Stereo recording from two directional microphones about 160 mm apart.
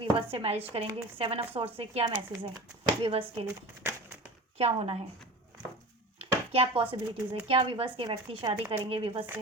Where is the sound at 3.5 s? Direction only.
15° right (ahead or behind).